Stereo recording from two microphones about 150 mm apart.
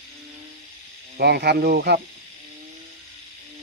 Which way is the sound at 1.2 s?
90° right.